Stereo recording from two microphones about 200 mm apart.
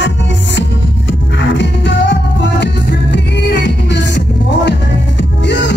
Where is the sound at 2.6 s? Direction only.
60° left (ahead or behind).